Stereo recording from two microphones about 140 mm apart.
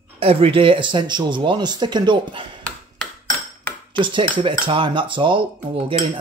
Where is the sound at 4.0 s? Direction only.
35° right (ahead or behind).